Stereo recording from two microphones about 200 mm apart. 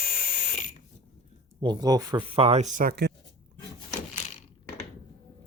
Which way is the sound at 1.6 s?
20° right (ahead or behind).